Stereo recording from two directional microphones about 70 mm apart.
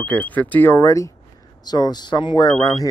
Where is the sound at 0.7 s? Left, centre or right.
Left.